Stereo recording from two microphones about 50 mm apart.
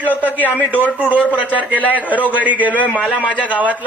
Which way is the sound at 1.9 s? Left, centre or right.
Right.